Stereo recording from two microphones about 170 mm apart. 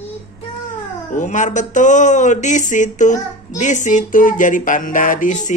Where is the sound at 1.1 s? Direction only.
45° left (ahead or behind).